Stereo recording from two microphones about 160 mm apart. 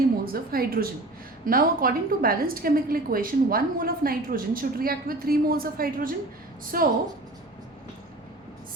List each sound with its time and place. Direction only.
0.3 s a woman's voice: 70° right (ahead or behind)